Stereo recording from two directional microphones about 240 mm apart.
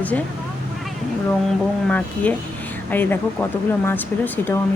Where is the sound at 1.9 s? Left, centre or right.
Centre.